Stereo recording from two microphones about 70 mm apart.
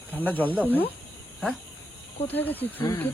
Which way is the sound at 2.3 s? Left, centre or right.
Left.